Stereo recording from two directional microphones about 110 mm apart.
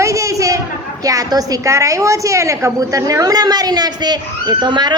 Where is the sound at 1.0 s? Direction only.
35° right (ahead or behind).